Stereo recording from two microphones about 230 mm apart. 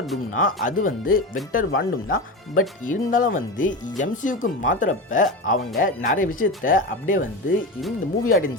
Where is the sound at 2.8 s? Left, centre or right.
Left.